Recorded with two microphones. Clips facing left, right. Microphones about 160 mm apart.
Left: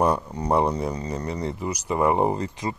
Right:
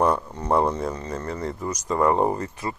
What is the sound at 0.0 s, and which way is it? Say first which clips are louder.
Speech: even; 10° left (ahead or behind).